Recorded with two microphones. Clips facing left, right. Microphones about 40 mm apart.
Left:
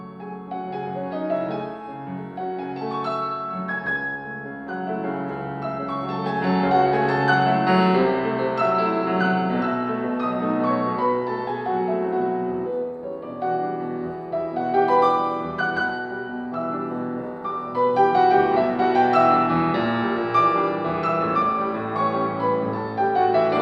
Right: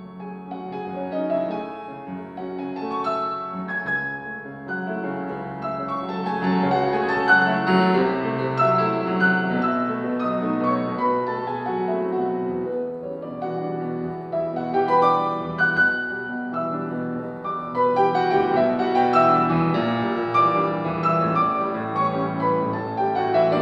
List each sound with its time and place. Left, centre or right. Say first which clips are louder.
1.1 s music: right 2 dB; centre
3.1 s music: right 2 dB; centre
6.2 s music: even; centre
14.3 s music: left 1 dB; centre
15.0 s music: even; centre
15.7 s music: right 8 dB; centre
17.5 s music: even; centre